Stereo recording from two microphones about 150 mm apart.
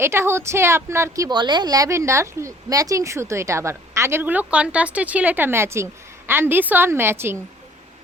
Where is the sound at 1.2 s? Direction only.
30° right (ahead or behind).